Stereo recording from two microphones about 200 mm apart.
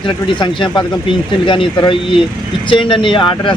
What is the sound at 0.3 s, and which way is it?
Speech, 25° left (ahead or behind).